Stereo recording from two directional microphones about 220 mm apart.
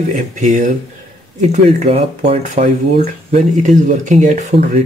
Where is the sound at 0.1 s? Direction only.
35° right (ahead or behind).